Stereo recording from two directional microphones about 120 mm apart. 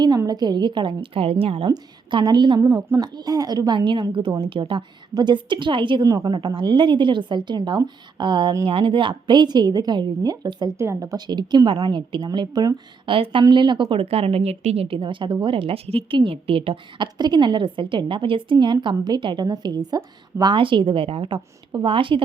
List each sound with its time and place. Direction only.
0.2 s a woman's voice: 35° right (ahead or behind)